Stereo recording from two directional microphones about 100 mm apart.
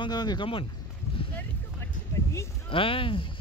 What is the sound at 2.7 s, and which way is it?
Speech, 60° left (ahead or behind).